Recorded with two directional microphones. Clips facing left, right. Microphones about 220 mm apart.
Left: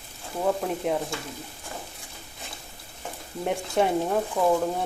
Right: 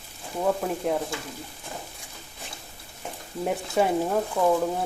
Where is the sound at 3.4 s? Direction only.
Centre (ahead or behind).